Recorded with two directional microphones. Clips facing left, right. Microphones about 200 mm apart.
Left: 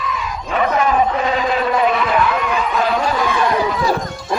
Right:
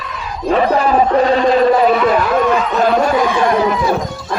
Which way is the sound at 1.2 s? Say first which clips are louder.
Right 7 dB; 35° right (ahead or behind).